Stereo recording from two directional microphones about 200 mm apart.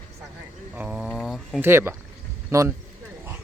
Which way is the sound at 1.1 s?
Centre (ahead or behind).